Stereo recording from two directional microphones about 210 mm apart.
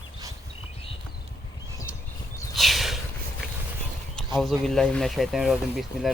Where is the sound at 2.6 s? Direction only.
Centre (ahead or behind).